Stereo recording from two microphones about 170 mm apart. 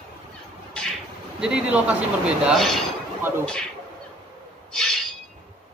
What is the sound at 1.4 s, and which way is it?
Speech, 5° right (ahead or behind).